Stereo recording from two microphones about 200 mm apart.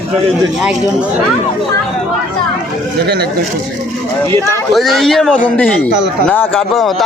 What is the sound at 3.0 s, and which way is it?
Speech, 55° right (ahead or behind).